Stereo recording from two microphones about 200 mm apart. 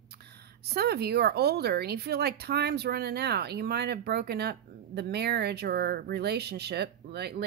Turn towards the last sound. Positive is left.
turn(degrees=-55)  # may be behind; listen again after turning